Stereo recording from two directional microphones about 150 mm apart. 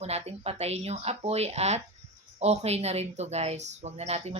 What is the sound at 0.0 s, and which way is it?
Speech, 45° right (ahead or behind).